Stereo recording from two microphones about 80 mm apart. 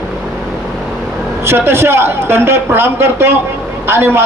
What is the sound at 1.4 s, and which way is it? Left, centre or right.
A man's voice, right.